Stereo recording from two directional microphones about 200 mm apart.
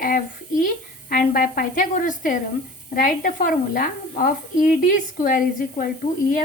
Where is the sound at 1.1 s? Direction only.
45° left (ahead or behind).